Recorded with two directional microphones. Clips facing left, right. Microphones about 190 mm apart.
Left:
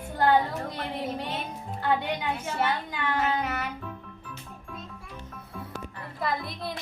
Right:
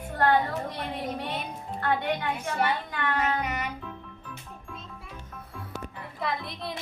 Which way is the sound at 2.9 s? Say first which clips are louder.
Even; 10° left (ahead or behind).